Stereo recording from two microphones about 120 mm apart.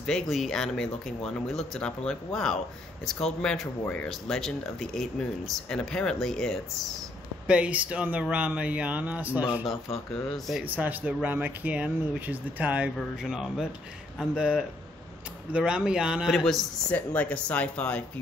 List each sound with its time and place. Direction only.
0.0 s speech: 5° left (ahead or behind)
7.4 s speech: 10° right (ahead or behind)
10.3 s speech: centre (ahead or behind)
10.6 s speech: 15° right (ahead or behind); by 16.5 s centre (ahead or behind)
16.9 s speech: 10° left (ahead or behind)